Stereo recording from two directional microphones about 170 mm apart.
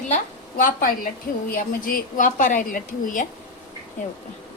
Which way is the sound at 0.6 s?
55° left (ahead or behind).